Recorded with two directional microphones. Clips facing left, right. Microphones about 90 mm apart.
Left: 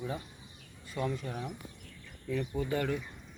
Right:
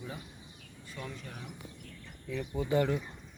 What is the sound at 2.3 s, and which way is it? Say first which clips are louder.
Speech: right 3 dB; 15° right (ahead or behind).